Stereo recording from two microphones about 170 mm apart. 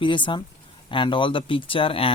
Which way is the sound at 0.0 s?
30° left (ahead or behind).